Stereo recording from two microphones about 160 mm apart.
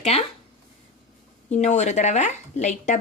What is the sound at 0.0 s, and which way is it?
Speech, 40° left (ahead or behind).